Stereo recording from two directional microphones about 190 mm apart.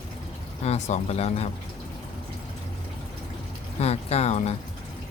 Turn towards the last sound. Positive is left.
turn(degrees=35)  # may be behind; listen again after turning